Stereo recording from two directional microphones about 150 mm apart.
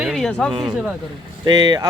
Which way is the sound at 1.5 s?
30° right (ahead or behind).